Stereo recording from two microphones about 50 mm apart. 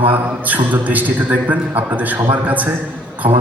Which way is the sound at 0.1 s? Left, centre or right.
Right.